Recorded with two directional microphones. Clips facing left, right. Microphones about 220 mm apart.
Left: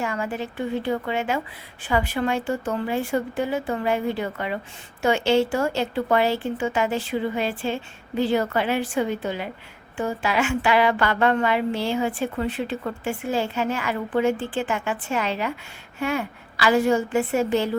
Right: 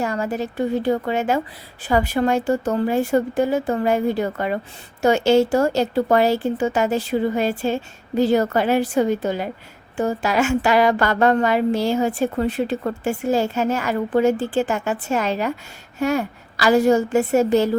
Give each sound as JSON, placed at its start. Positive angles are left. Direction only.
{"t": 0.0, "sound": "a woman's voice", "side_deg": -40}